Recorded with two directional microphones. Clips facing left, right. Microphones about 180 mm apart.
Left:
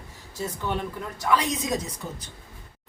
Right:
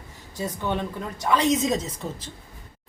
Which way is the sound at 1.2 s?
20° right (ahead or behind).